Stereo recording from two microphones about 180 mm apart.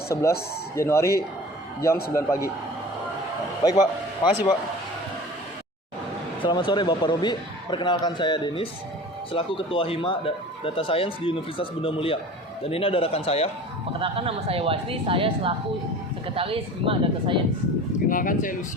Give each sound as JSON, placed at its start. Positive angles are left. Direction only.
{"t": 0.1, "sound": "speech", "side_deg": 15}
{"t": 3.6, "sound": "a man's voice", "side_deg": 20}
{"t": 6.4, "sound": "a man's voice", "side_deg": 25}
{"t": 14.0, "sound": "speech", "side_deg": -30}
{"t": 18.1, "sound": "speech", "side_deg": 50}